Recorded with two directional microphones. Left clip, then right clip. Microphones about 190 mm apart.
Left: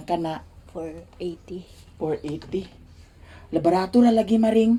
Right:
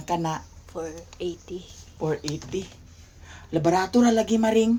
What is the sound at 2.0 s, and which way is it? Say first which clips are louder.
Speech: left 1 dB; 10° left (ahead or behind).